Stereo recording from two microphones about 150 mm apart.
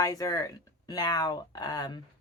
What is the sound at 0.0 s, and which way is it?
A woman's voice, 25° left (ahead or behind).